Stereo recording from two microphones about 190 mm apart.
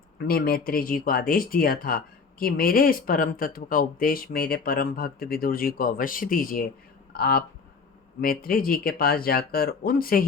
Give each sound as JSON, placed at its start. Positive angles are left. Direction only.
{"t": 0.2, "sound": "speech", "side_deg": 55}